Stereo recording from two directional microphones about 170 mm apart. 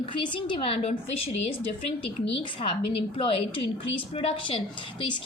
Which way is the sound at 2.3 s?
30° left (ahead or behind).